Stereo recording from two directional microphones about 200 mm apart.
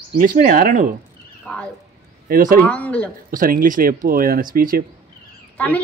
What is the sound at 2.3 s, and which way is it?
Speech, 40° right (ahead or behind).